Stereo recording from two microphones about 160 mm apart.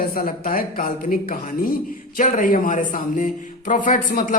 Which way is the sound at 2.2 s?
55° left (ahead or behind).